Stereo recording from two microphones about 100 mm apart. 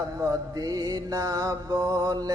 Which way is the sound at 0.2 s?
35° right (ahead or behind).